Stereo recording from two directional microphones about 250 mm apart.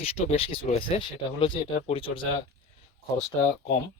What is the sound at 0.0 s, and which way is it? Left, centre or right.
Speech, left.